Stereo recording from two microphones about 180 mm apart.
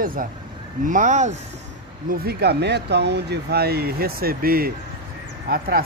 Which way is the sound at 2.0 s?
60° right (ahead or behind).